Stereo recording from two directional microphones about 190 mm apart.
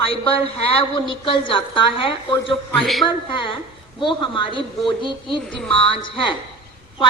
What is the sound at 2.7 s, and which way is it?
Speech, centre (ahead or behind).